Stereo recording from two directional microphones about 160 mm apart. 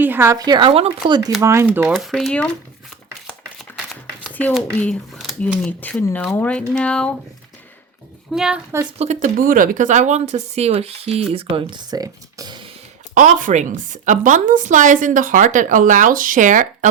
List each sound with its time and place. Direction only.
0.0 s speech: 15° right (ahead or behind)
1.4 s speech: 15° right (ahead or behind)
1.9 s speech: centre (ahead or behind)
4.5 s speech: 5° left (ahead or behind)
5.8 s speech: 10° left (ahead or behind)
8.3 s speech: 5° right (ahead or behind)
9.0 s a woman's voice: 50° right (ahead or behind); by 12.5 s 20° right (ahead or behind)
13.1 s a woman's voice: 50° right (ahead or behind)